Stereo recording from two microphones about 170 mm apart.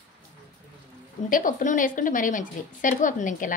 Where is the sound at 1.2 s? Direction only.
50° left (ahead or behind).